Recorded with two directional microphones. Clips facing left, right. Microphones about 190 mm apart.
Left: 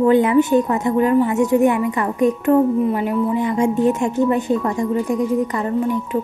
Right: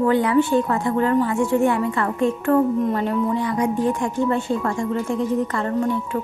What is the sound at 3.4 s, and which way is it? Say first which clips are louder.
A woman's voice: left 4 dB; 25° left (ahead or behind).